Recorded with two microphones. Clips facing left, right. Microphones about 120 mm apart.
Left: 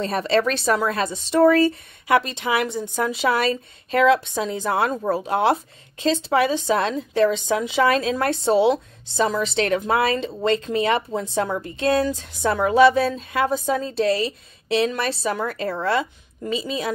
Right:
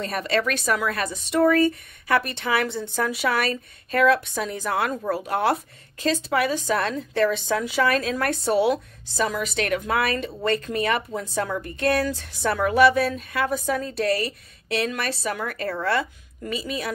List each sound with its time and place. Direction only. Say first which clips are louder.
0.0 s speech: left 4 dB; 30° left (ahead or behind)
2.0 s speech: left 3 dB; 20° left (ahead or behind)